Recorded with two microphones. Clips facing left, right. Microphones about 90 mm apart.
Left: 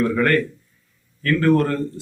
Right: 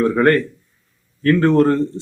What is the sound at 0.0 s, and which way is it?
A man's voice, 30° right (ahead or behind).